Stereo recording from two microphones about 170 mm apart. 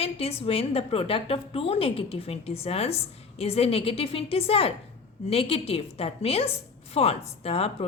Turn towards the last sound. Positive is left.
turn(degrees=35)  # may be behind; listen again after turning